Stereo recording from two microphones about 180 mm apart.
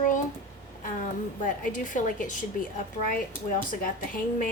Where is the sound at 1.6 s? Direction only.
45° left (ahead or behind).